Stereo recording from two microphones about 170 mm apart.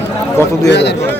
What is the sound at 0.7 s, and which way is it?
Speech, 90° left.